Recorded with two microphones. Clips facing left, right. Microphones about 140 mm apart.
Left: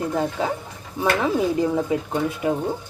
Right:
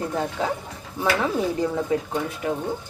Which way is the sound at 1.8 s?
10° left (ahead or behind).